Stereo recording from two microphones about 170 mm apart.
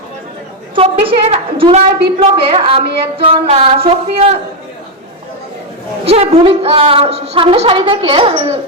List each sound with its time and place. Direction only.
0.8 s a woman's voice: 35° right (ahead or behind)
6.1 s a woman's voice: 35° right (ahead or behind)